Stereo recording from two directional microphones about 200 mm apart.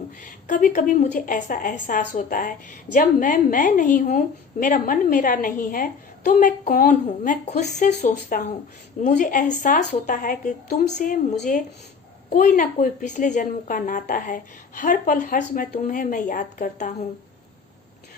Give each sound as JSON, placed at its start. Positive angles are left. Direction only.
{"t": 0.2, "sound": "a woman's voice", "side_deg": 40}